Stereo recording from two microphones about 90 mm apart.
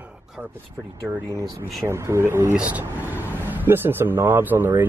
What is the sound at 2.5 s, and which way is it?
Speech, 15° right (ahead or behind).